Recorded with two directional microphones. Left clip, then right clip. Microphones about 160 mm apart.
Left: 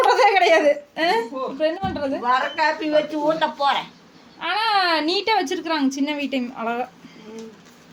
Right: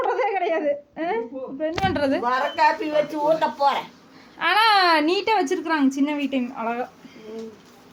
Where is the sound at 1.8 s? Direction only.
20° right (ahead or behind).